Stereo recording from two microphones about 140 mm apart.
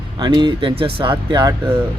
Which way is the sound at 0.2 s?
30° right (ahead or behind).